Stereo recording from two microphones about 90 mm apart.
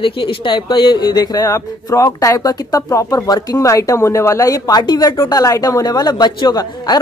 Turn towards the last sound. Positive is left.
turn(degrees=45)  # may be behind; listen again after turning